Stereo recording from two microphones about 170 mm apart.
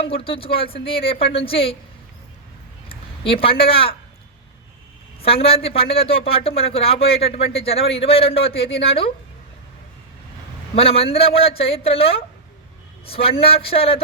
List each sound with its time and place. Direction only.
0.0 s a man's voice: 35° left (ahead or behind)
2.9 s speech: 35° left (ahead or behind)
5.2 s a man's voice: 35° left (ahead or behind)
10.8 s a man's voice: 35° left (ahead or behind)